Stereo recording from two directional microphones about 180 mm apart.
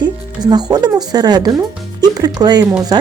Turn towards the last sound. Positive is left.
turn(degrees=-20)  # may be behind; listen again after turning